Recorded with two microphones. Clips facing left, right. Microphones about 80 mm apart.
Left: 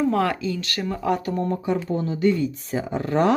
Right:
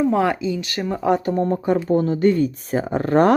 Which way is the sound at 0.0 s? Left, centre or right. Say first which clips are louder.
Right 3 dB; centre.